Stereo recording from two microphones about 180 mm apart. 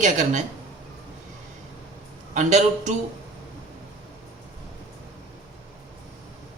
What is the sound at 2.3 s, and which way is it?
Speech, 40° right (ahead or behind).